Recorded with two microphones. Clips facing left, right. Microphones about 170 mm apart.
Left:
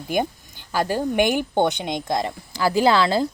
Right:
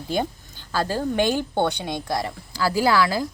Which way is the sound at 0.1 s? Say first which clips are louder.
Left 2 dB; 15° left (ahead or behind).